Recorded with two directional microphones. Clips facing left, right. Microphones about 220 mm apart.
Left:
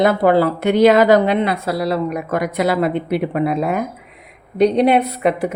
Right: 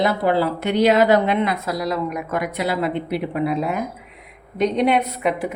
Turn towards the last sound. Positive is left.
turn(degrees=35)  # may be behind; listen again after turning